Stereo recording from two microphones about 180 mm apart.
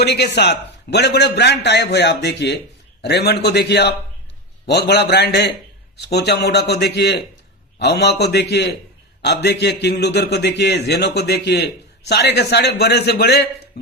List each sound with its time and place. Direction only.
0.0 s a man's voice: 65° left (ahead or behind)